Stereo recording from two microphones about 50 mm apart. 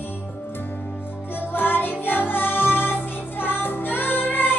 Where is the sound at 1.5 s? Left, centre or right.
Left.